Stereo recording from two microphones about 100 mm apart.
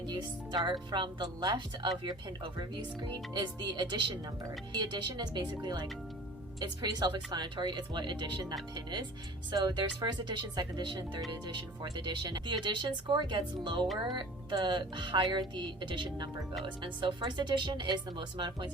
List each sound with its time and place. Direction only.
0.0 s speech: 50° right (ahead or behind)